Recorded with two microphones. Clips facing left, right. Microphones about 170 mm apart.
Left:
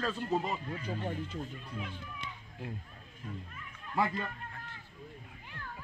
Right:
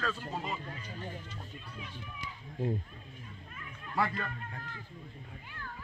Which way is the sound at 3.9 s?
20° left (ahead or behind).